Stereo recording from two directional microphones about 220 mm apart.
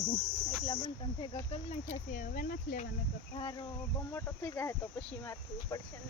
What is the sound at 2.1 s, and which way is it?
Speech, 35° left (ahead or behind).